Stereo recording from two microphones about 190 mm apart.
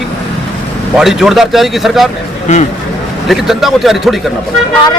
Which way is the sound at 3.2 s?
Centre (ahead or behind).